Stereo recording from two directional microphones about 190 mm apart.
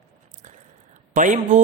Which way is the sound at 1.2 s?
40° right (ahead or behind).